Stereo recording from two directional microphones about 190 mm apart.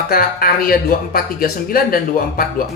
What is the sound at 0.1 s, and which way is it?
Speech, 50° left (ahead or behind).